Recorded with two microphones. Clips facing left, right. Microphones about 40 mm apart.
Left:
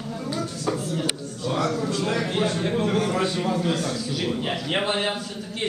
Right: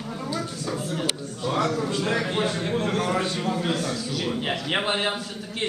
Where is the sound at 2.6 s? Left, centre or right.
Centre.